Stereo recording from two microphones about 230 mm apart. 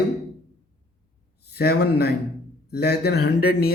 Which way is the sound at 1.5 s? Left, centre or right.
Left.